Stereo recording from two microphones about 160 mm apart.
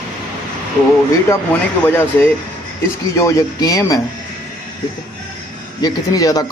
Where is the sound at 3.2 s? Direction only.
20° left (ahead or behind).